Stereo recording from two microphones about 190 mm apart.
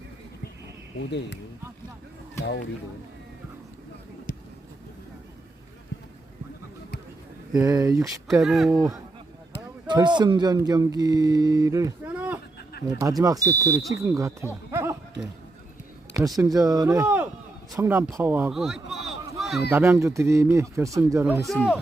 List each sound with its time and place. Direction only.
2.4 s speech: 65° left (ahead or behind)
7.6 s speech: 15° right (ahead or behind)
8.4 s speech: centre (ahead or behind)
8.7 s speech: 15° right (ahead or behind)
16.1 s a man's voice: 20° right (ahead or behind); by 19.6 s centre (ahead or behind)
19.7 s speech: 15° right (ahead or behind)
21.4 s speech: centre (ahead or behind)